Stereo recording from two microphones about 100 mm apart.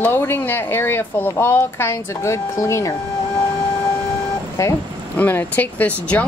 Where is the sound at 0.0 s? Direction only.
20° left (ahead or behind).